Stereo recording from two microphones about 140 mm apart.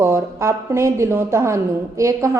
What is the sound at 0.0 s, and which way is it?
A woman's voice, 20° right (ahead or behind).